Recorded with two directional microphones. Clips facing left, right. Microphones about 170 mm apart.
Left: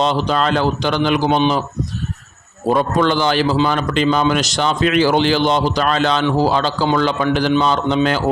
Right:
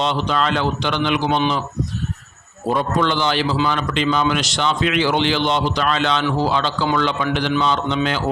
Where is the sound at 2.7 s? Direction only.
45° left (ahead or behind).